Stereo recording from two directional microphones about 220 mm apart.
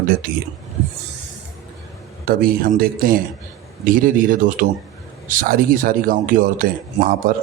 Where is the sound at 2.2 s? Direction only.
40° right (ahead or behind).